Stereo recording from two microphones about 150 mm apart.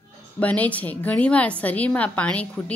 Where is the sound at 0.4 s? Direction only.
10° left (ahead or behind).